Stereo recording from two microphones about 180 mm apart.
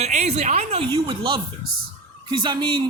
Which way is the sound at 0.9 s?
25° right (ahead or behind).